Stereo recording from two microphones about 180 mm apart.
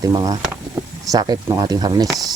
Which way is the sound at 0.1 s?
20° right (ahead or behind).